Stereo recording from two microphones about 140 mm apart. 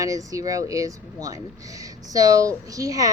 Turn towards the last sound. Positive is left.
turn(degrees=-25)  # may be behind; listen again after turning